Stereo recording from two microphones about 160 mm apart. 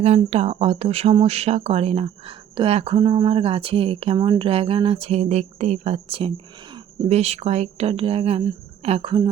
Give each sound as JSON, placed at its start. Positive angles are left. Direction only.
{"t": 0.3, "sound": "speech", "side_deg": -40}